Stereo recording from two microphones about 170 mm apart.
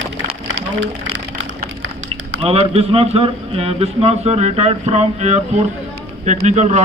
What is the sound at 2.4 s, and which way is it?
A man's voice, 35° right (ahead or behind).